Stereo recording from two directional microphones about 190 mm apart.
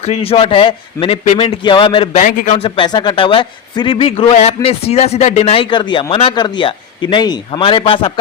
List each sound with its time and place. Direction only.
0.0 s a man's voice: 30° left (ahead or behind)
2.2 s a man's voice: 45° left (ahead or behind)
2.6 s a man's voice: 25° left (ahead or behind)